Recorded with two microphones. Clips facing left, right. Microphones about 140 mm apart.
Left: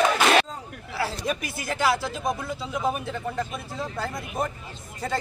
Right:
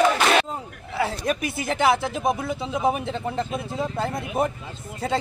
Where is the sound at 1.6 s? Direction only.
20° right (ahead or behind).